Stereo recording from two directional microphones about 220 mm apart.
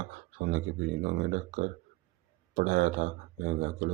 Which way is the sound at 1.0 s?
45° right (ahead or behind).